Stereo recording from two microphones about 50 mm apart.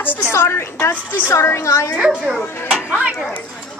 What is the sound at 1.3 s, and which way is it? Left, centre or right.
Speech, left.